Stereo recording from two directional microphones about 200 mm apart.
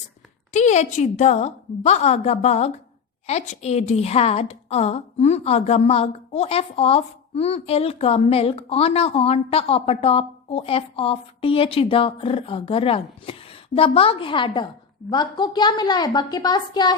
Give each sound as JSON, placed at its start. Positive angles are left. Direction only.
{"t": 0.5, "sound": "a woman's voice", "side_deg": 35}